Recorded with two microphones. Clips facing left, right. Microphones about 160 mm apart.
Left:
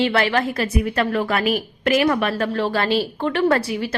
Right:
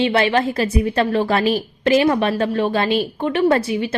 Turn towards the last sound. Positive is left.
turn(degrees=-20)  # may be behind; listen again after turning